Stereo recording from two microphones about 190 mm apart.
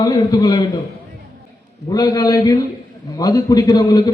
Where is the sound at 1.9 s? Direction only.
20° left (ahead or behind).